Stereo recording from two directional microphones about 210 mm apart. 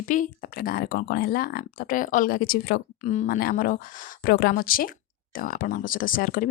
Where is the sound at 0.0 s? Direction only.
40° left (ahead or behind).